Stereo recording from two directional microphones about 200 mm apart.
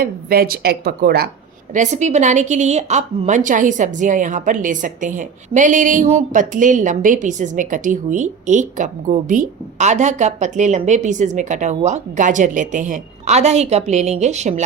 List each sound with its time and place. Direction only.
0.0 s a woman's voice: 50° right (ahead or behind)
1.7 s a woman's voice: 35° right (ahead or behind)